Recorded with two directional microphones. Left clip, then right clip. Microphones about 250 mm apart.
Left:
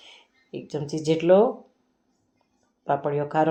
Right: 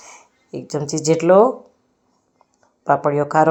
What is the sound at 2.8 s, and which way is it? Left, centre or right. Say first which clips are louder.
Speech: right 8 dB; centre.